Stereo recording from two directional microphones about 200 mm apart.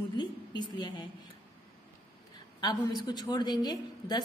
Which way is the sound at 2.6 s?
20° left (ahead or behind).